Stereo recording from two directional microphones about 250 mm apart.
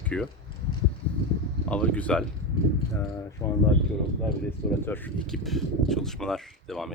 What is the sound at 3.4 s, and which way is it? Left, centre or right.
Speech, centre.